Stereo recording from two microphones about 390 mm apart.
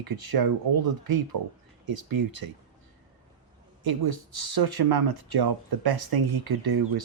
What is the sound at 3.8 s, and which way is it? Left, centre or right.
Speech, right.